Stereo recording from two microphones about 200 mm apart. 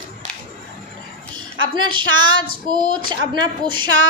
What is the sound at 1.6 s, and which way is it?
Speech, 25° right (ahead or behind).